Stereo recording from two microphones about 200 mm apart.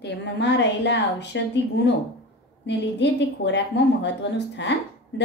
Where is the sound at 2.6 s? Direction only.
60° left (ahead or behind).